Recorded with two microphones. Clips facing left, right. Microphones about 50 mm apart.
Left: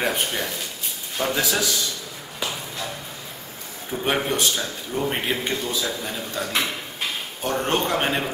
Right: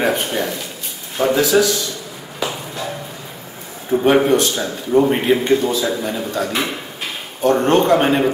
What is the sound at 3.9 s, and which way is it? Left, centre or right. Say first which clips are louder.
Speech: right 12 dB; right.